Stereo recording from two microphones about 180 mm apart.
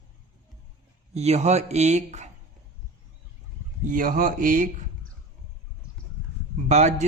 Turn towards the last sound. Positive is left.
turn(degrees=-40)  # may be behind; listen again after turning